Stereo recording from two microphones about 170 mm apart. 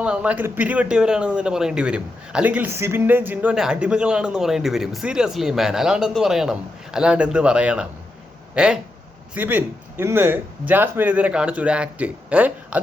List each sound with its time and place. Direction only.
0.0 s a man's voice: 5° right (ahead or behind)